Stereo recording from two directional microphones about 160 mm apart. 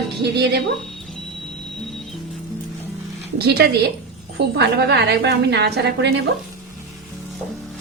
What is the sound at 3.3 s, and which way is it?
A woman's voice, 85° right.